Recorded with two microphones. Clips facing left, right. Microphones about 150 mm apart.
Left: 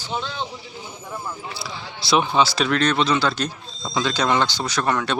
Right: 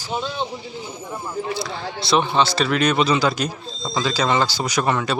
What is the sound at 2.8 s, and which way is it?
Speech, 10° right (ahead or behind).